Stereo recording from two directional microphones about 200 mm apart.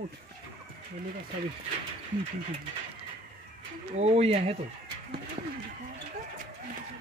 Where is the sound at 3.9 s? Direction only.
30° right (ahead or behind).